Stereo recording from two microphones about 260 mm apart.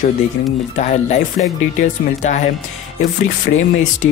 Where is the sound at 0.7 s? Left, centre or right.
Left.